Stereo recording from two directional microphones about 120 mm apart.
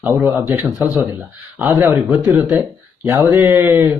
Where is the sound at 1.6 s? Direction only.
15° right (ahead or behind).